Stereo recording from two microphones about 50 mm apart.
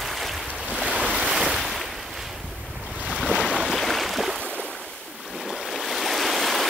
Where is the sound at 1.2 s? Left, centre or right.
Centre.